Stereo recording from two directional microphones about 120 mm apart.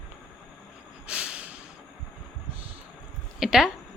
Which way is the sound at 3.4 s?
5° right (ahead or behind).